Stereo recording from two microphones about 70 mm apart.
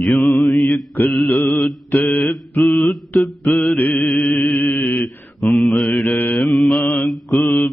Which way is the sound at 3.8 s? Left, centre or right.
Centre.